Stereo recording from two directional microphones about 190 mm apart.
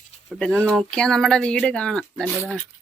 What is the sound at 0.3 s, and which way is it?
Speech, 5° left (ahead or behind).